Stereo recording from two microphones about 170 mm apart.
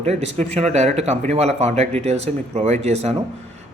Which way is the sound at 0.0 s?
40° right (ahead or behind).